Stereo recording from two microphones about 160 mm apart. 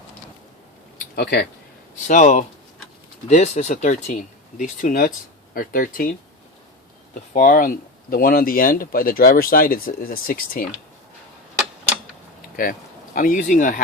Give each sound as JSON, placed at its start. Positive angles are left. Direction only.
{"t": 0.9, "sound": "a sound", "side_deg": 70}
{"t": 2.0, "sound": "speech", "side_deg": 50}
{"t": 7.1, "sound": "speech", "side_deg": 60}
{"t": 12.6, "sound": "speech", "side_deg": 60}